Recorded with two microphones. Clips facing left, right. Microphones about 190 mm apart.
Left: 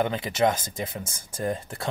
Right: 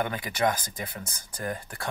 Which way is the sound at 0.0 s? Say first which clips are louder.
Left 4 dB; 25° left (ahead or behind).